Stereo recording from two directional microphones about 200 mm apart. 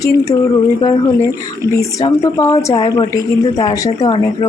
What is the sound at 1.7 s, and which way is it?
A woman's voice, 15° left (ahead or behind).